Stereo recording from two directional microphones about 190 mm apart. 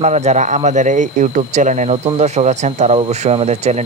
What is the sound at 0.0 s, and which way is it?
Speech, 35° right (ahead or behind).